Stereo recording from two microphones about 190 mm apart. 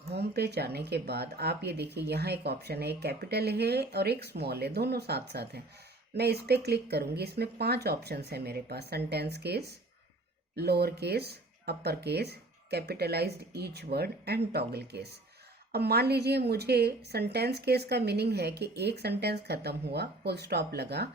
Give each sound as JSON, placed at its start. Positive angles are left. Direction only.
{"t": 0.1, "sound": "speech", "side_deg": -60}